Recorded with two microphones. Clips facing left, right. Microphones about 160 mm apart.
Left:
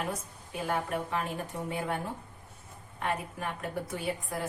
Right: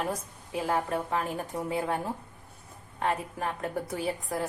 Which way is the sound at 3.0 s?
35° right (ahead or behind).